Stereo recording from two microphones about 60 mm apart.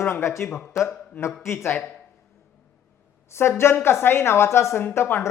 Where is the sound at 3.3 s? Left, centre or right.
Left.